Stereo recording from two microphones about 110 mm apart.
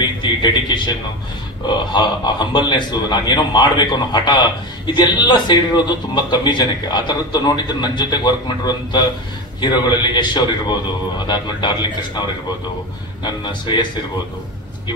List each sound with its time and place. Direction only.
0.0 s a man's voice: 45° left (ahead or behind)